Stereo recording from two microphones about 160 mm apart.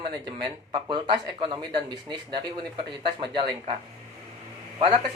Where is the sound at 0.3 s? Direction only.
30° right (ahead or behind).